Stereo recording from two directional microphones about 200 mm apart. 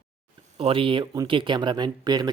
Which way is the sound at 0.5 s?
25° right (ahead or behind).